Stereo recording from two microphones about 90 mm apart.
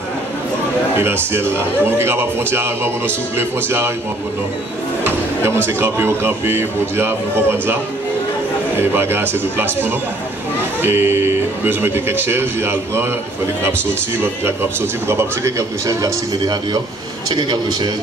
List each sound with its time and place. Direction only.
0.9 s speech: 25° right (ahead or behind)
5.7 s speech: 25° right (ahead or behind)
8.7 s speech: 25° right (ahead or behind)
14.2 s speech: 25° right (ahead or behind)
17.3 s a man's voice: 55° right (ahead or behind)